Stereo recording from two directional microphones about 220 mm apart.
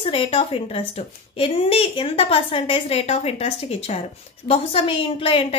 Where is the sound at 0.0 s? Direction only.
25° left (ahead or behind).